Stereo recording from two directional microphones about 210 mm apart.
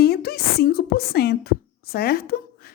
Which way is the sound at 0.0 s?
45° left (ahead or behind).